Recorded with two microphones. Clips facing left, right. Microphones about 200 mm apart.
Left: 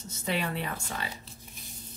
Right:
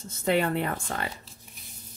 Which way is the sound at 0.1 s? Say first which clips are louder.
Right 7 dB; 55° right (ahead or behind).